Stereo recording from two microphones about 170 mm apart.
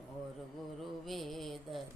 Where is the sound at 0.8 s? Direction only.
Centre (ahead or behind).